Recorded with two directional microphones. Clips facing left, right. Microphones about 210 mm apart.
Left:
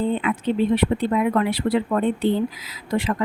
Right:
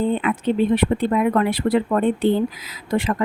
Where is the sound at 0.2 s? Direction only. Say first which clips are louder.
Right 2 dB; 50° right (ahead or behind).